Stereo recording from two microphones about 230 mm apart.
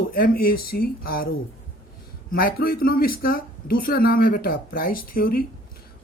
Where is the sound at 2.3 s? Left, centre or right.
Left.